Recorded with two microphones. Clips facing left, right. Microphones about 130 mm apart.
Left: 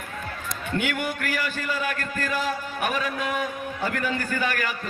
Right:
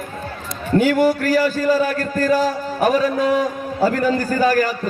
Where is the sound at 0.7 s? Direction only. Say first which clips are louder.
Right 13 dB; 35° right (ahead or behind).